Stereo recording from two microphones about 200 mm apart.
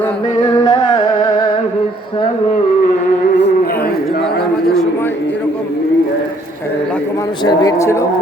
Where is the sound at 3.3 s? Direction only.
55° left (ahead or behind).